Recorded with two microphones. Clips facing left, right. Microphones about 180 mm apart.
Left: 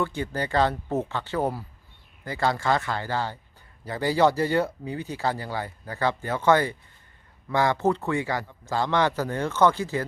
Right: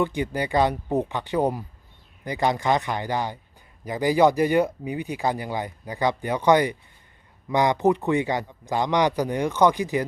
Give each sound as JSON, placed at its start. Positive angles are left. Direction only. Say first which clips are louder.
{"t": 0.0, "sound": "speech", "louder": "right 3 dB", "side_deg": -15}